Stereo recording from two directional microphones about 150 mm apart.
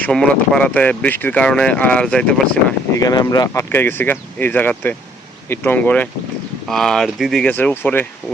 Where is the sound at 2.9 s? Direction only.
25° left (ahead or behind).